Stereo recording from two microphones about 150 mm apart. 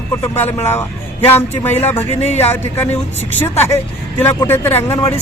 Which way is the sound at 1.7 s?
45° left (ahead or behind).